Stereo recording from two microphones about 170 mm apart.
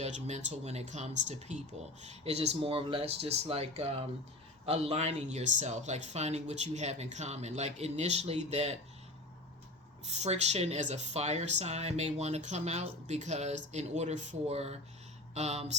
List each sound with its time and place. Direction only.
0.0 s speech: 40° right (ahead or behind)
10.1 s speech: 40° right (ahead or behind)